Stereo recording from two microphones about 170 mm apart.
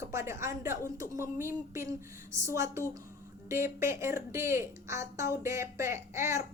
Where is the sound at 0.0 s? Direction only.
15° right (ahead or behind).